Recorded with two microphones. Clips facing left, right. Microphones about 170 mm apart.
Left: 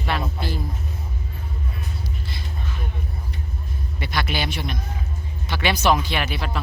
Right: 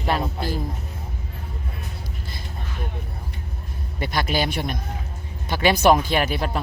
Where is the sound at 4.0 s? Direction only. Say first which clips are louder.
Right 3 dB; 45° right (ahead or behind).